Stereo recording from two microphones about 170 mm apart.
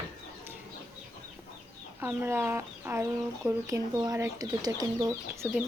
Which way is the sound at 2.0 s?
15° right (ahead or behind).